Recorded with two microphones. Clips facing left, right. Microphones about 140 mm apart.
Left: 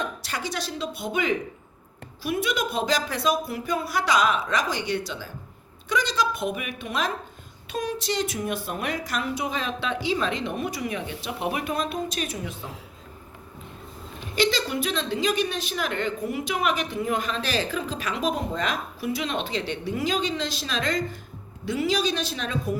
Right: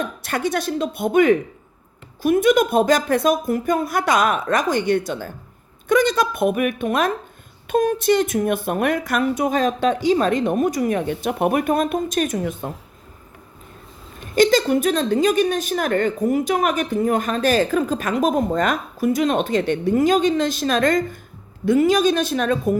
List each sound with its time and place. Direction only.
0.0 s a woman's voice: 55° right (ahead or behind)
14.2 s a woman's voice: 45° right (ahead or behind)